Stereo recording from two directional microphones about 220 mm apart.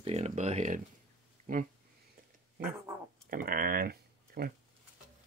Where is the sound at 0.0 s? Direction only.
30° right (ahead or behind).